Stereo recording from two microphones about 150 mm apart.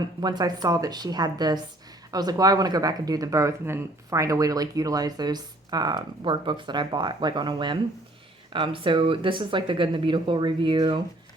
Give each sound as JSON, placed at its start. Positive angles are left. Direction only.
{"t": 0.2, "sound": "speech", "side_deg": -25}